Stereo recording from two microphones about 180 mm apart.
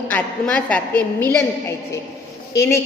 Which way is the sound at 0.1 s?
5° left (ahead or behind).